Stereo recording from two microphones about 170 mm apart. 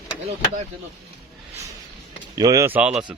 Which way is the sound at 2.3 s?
20° right (ahead or behind).